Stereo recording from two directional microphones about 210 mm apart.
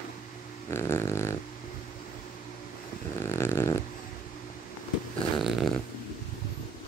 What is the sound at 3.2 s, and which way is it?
Dog, 10° left (ahead or behind).